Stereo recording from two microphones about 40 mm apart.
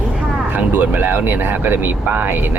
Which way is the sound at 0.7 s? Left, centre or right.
Right.